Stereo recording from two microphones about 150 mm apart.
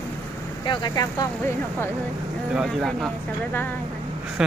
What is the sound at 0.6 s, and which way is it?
Speech, 30° left (ahead or behind).